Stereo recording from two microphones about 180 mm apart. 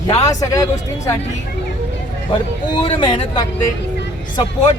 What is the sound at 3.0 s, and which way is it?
Speech, 25° left (ahead or behind).